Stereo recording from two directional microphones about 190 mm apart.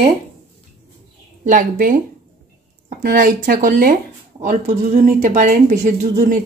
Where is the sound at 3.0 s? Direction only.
45° right (ahead or behind).